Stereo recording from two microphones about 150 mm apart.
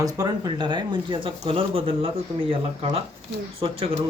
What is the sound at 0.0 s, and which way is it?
Speech, 25° right (ahead or behind).